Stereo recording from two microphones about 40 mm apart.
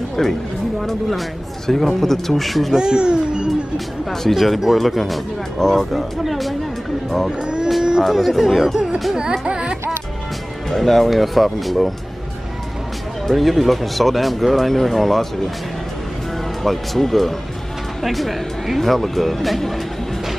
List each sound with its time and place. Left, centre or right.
0.2 s speech: centre
2.7 s a child's voice: right
4.1 s speech: centre
7.2 s a child's voice: centre
8.0 s a child's voice: centre
9.1 s music: centre
10.7 s speech: centre
13.3 s speech: centre
16.6 s speech: centre